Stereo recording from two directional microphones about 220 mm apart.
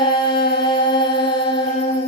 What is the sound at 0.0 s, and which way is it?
Music, 20° left (ahead or behind).